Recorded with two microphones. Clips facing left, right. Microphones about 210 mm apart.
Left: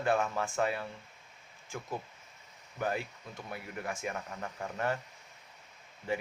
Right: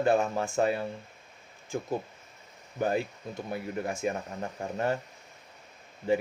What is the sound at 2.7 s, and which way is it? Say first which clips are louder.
A man's voice: right 6 dB; 30° right (ahead or behind).